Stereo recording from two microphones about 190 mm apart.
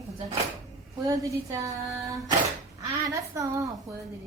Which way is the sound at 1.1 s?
15° right (ahead or behind).